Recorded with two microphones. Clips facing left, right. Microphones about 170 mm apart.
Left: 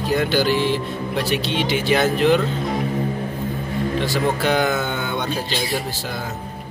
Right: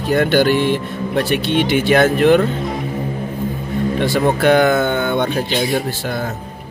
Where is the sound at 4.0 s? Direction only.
55° right (ahead or behind).